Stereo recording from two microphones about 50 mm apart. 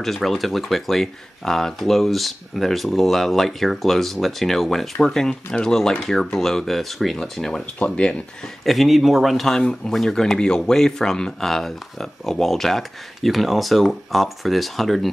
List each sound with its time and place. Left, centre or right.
0.0 s speech: centre
8.6 s speech: centre
9.6 s speech: centre